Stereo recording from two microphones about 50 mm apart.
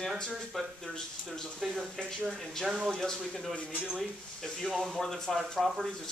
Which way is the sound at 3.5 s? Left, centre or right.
Left.